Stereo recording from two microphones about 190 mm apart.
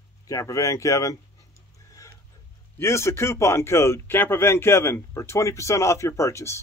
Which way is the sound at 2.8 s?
15° left (ahead or behind).